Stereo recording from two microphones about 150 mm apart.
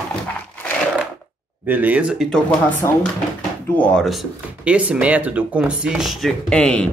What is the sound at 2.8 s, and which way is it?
Speech, 20° left (ahead or behind).